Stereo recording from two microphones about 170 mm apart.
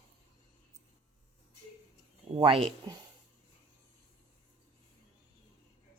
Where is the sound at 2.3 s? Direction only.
30° right (ahead or behind).